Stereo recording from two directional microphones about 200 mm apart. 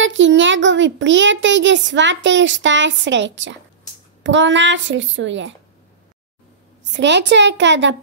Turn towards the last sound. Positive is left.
turn(degrees=-65)  # may be behind; listen again after turning